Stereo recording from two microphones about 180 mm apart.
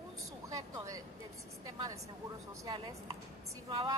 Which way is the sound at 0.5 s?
20° right (ahead or behind).